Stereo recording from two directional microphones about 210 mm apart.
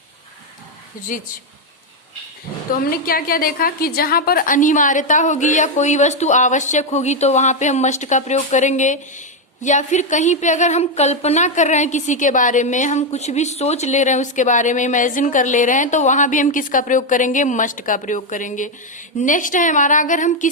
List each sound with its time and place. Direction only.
1.1 s a woman's voice: 40° left (ahead or behind)
2.7 s a woman's voice: 45° left (ahead or behind)